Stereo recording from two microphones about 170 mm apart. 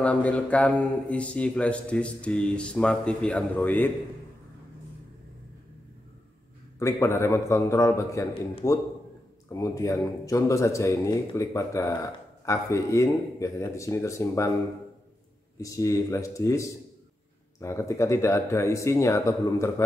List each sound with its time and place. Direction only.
0.0 s speech: 5° left (ahead or behind)
6.8 s speech: 15° left (ahead or behind)
15.6 s speech: 20° left (ahead or behind)